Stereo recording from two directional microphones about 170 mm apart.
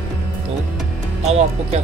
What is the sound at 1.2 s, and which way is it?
Speech, 40° right (ahead or behind).